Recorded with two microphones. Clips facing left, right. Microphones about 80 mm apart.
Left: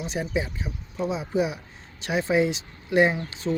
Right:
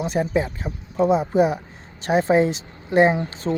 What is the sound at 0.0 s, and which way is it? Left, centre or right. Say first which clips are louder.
Speech: right 6 dB; right.